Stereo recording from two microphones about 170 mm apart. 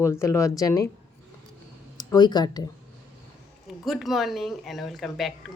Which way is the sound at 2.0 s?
25° left (ahead or behind).